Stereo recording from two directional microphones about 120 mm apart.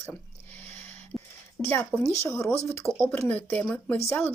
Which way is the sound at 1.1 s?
5° right (ahead or behind).